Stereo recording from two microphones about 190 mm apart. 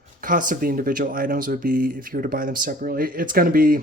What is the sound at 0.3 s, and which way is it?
Speech, 45° right (ahead or behind).